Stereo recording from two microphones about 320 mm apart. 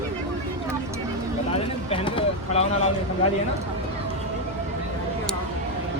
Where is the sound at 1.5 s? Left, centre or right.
Centre.